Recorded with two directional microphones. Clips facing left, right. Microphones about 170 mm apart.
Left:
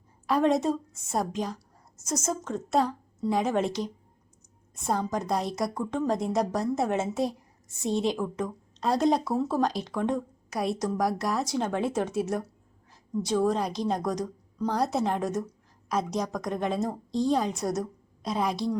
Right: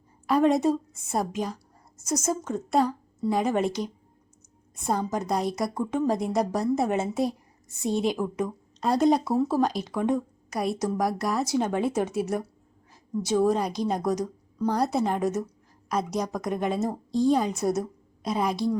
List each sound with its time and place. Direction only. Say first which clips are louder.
0.3 s a woman's voice: right 2 dB; centre (ahead or behind)